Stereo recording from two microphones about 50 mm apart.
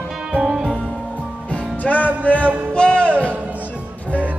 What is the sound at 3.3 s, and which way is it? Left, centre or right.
Music, right.